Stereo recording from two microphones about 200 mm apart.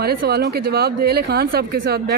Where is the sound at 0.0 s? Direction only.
50° right (ahead or behind).